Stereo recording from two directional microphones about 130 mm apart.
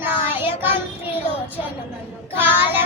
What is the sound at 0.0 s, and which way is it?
Child singing, 15° right (ahead or behind).